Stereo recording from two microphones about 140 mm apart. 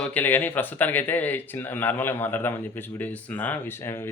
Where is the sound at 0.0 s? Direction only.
10° left (ahead or behind).